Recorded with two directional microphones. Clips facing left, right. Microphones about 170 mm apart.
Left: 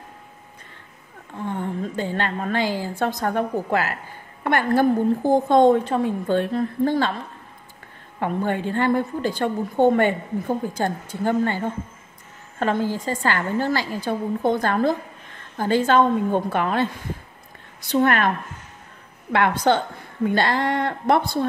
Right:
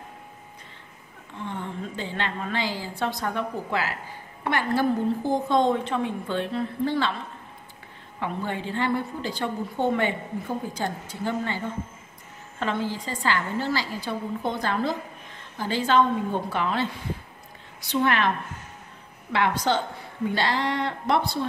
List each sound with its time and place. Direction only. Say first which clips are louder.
1.3 s a woman's voice: left 6 dB; 45° left (ahead or behind)
8.2 s a woman's voice: left 6 dB; 50° left (ahead or behind)
19.3 s a woman's voice: left 5 dB; 55° left (ahead or behind)